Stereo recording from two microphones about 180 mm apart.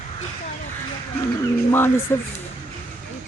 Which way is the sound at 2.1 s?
15° left (ahead or behind).